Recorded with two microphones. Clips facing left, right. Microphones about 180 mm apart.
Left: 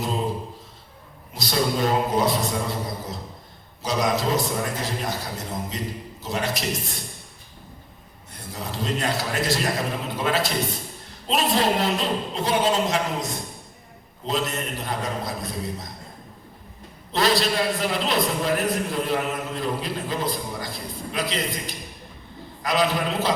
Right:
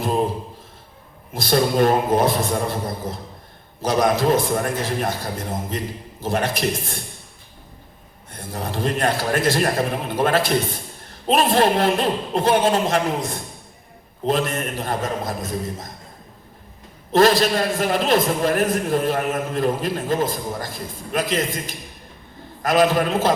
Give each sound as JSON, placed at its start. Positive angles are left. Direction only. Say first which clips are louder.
{"t": 1.3, "sound": "a man's voice", "louder": "right 5 dB", "side_deg": -55}
{"t": 8.3, "sound": "a man's voice", "louder": "right 5 dB", "side_deg": -55}
{"t": 17.1, "sound": "a man's voice", "louder": "right 6 dB", "side_deg": -50}